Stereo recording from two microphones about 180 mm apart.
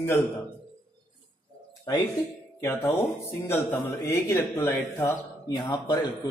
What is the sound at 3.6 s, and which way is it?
A man's voice, 20° left (ahead or behind).